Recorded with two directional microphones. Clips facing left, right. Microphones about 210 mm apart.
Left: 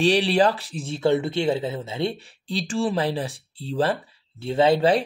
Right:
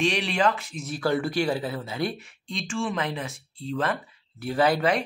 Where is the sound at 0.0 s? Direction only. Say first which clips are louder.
Left 5 dB; 35° left (ahead or behind).